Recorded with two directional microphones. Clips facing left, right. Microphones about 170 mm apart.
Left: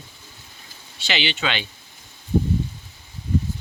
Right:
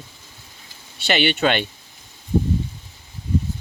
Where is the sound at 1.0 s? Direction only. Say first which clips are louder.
Right 7 dB; 55° right (ahead or behind).